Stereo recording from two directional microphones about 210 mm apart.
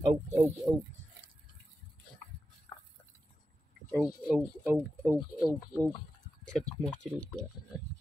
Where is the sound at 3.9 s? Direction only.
Centre (ahead or behind).